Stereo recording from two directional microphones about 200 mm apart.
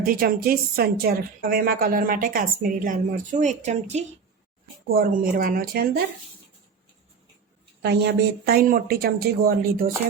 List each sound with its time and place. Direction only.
0.0 s a woman's voice: 50° right (ahead or behind)
4.9 s a woman's voice: 45° right (ahead or behind)
7.8 s a woman's voice: 55° right (ahead or behind)